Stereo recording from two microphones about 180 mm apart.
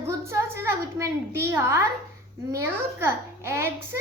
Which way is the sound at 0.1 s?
15° right (ahead or behind).